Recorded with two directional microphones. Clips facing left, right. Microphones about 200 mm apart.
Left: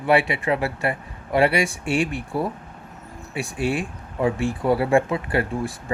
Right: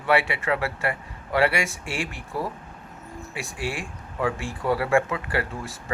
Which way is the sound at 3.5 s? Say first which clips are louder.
Left 8 dB; 20° left (ahead or behind).